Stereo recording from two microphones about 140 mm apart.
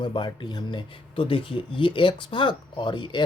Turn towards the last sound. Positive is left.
turn(degrees=35)  # may be behind; listen again after turning